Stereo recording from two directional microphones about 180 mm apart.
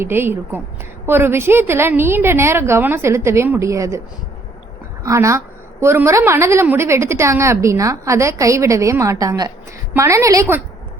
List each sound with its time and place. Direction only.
0.0 s a woman's voice: 15° right (ahead or behind)
5.0 s a woman's voice: 15° right (ahead or behind)